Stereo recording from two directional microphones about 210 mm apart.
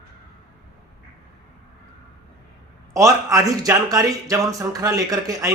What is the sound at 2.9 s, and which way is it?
Speech, 15° right (ahead or behind).